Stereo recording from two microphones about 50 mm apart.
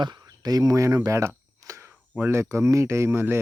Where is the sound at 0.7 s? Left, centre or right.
Right.